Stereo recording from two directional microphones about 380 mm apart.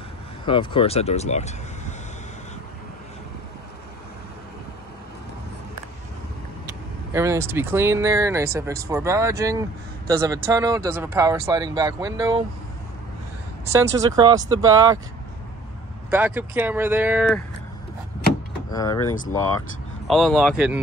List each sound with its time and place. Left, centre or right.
0.5 s speech: centre
6.6 s speech: centre
13.7 s speech: centre
16.1 s speech: centre
18.7 s speech: centre
20.1 s speech: centre